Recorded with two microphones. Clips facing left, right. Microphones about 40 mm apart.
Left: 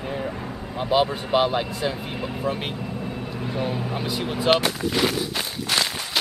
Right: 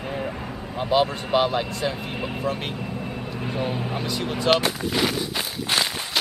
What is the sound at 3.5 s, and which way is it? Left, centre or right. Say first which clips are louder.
Speech: even; centre.